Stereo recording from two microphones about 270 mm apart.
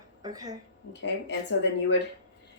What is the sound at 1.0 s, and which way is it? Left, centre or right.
Speech, left.